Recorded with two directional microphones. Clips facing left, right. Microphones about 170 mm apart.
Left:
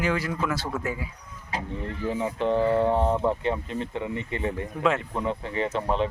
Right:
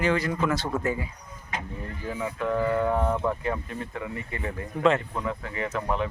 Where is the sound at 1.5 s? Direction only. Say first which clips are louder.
Left 3 dB; 25° left (ahead or behind).